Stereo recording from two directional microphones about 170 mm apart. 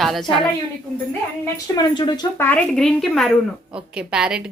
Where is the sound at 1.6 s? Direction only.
25° left (ahead or behind).